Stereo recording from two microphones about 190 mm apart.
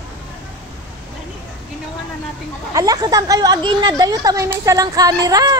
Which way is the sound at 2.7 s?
20° right (ahead or behind).